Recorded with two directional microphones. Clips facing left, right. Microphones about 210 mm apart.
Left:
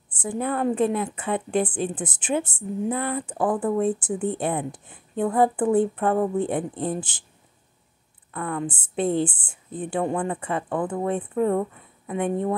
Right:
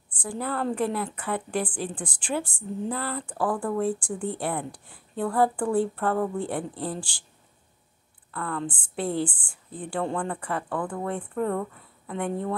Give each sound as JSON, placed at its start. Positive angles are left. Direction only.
{"t": 0.2, "sound": "a woman's voice", "side_deg": 20}
{"t": 8.3, "sound": "a woman's voice", "side_deg": 20}